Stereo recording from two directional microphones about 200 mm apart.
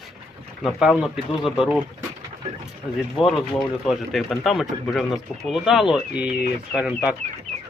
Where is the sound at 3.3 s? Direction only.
Centre (ahead or behind).